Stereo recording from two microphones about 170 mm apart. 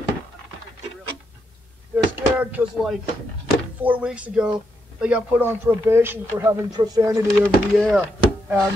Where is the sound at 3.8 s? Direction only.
10° right (ahead or behind).